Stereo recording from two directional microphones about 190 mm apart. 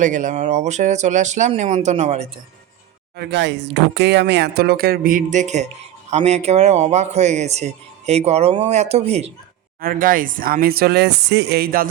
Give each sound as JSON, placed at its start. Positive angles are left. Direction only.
{"t": 0.0, "sound": "a man's voice", "side_deg": -40}
{"t": 3.2, "sound": "a man's voice", "side_deg": -65}
{"t": 9.8, "sound": "speech", "side_deg": -45}